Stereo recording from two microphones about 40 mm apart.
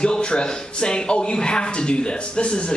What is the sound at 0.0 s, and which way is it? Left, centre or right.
A man's voice, left.